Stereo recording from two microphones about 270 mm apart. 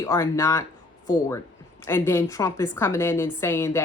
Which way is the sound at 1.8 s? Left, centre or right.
Centre.